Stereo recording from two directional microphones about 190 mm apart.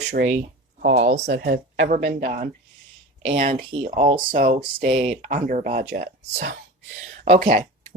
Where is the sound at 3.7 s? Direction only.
30° right (ahead or behind).